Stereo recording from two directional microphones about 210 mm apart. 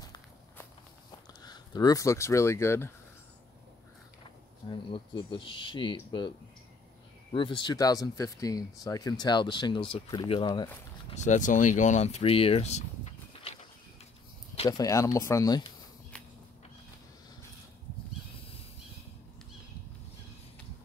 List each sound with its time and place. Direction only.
0.0 s walk: 15° left (ahead or behind)
1.4 s speech: 20° left (ahead or behind)
4.6 s speech: 25° left (ahead or behind)
7.3 s speech: 25° left (ahead or behind)
11.1 s speech: 35° left (ahead or behind)
14.5 s a sound: 30° left (ahead or behind)
14.8 s speech: 15° left (ahead or behind)